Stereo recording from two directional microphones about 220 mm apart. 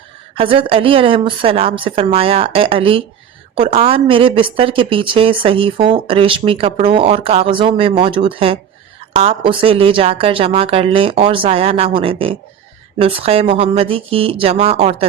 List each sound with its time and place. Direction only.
0.3 s a woman's voice: 25° right (ahead or behind)